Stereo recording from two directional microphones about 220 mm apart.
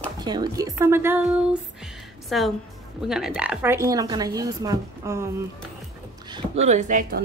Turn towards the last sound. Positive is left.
turn(degrees=-35)  # may be behind; listen again after turning